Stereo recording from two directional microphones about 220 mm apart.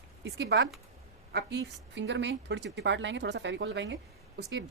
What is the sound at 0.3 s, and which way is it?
A woman's voice, 50° right (ahead or behind).